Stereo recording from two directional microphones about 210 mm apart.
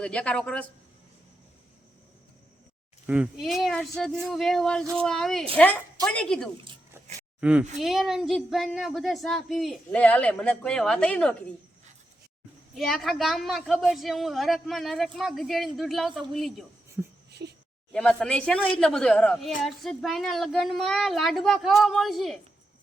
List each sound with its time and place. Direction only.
0.0 s a woman's voice: 5° left (ahead or behind)
3.1 s a woman's voice: 5° right (ahead or behind)
7.8 s a woman's voice: centre (ahead or behind)
12.7 s a woman's voice: centre (ahead or behind)
17.4 s a sound: 50° right (ahead or behind)
17.9 s a woman's voice: 5° left (ahead or behind)